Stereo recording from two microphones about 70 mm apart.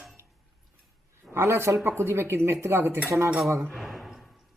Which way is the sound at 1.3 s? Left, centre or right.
Right.